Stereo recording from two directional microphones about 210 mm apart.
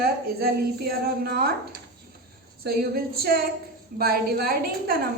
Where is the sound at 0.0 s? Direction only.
50° right (ahead or behind).